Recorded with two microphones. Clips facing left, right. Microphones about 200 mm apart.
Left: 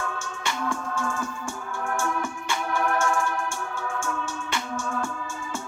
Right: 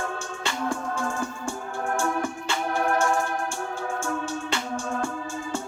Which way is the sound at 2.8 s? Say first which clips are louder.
Right 2 dB; 35° right (ahead or behind).